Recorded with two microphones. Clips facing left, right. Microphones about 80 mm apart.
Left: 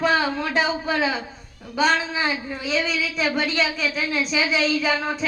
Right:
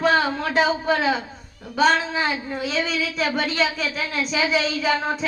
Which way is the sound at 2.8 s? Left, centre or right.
Right.